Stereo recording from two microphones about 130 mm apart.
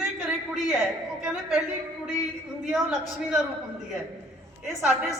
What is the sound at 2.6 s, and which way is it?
Speech, 5° right (ahead or behind).